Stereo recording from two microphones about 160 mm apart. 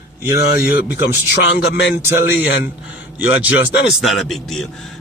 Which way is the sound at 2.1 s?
15° right (ahead or behind).